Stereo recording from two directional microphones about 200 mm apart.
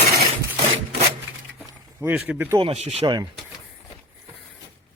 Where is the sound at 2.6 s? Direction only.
30° right (ahead or behind).